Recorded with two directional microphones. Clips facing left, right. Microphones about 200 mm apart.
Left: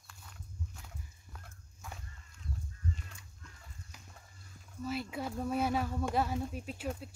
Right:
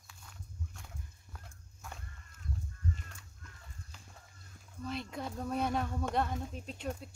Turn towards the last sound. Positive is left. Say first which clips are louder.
# left 1 dB
turn(degrees=5)  # may be behind; listen again after turning